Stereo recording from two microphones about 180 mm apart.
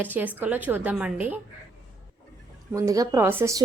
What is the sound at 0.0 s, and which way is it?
Speech, 10° right (ahead or behind).